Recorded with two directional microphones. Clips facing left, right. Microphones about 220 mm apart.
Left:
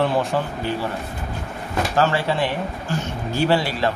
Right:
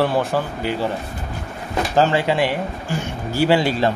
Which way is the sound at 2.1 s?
15° right (ahead or behind).